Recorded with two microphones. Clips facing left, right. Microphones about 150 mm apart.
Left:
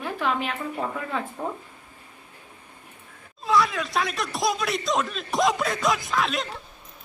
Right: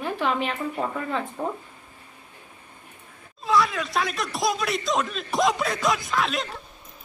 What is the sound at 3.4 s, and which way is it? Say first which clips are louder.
Speech: even; centre (ahead or behind).